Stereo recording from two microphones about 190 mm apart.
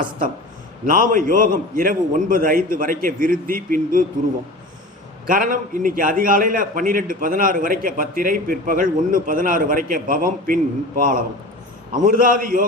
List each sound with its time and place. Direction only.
0.9 s a man's voice: 45° right (ahead or behind)
5.2 s a man's voice: 45° right (ahead or behind)